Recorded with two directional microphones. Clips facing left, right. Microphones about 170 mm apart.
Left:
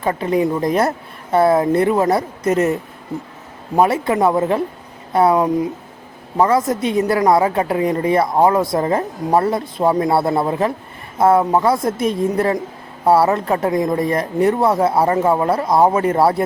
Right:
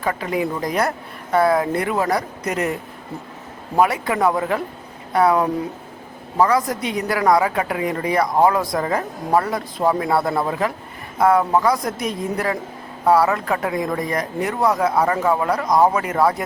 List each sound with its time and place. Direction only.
0.0 s a woman's voice: 25° left (ahead or behind)
3.8 s a woman's voice: 25° left (ahead or behind)